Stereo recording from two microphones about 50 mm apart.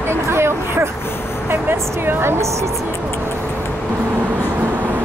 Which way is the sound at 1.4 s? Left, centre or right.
Right.